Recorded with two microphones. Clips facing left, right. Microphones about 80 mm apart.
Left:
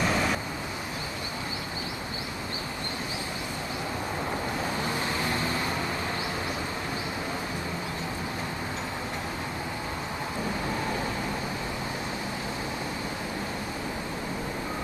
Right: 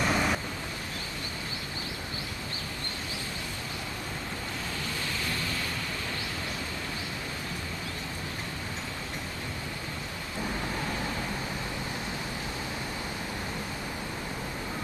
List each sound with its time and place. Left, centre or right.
0.0 s vehicle: centre
4.8 s vehicle: left